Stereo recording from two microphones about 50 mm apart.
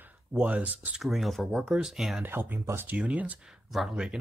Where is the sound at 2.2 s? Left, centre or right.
Right.